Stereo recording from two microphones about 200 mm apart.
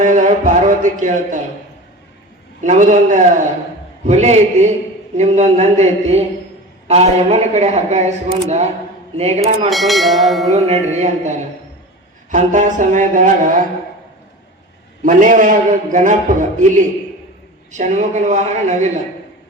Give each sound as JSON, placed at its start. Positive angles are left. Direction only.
{"t": 0.0, "sound": "speech", "side_deg": -40}
{"t": 2.6, "sound": "a man's voice", "side_deg": -40}
{"t": 9.6, "sound": "speech", "side_deg": 0}
{"t": 10.5, "sound": "a man's voice", "side_deg": -35}
{"t": 15.0, "sound": "a man's voice", "side_deg": -40}